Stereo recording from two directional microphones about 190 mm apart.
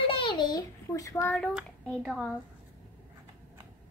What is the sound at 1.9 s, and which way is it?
Speech, 5° left (ahead or behind).